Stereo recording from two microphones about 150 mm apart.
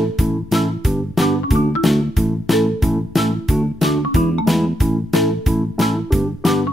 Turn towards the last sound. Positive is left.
turn(degrees=0)  # may be behind; listen again after turning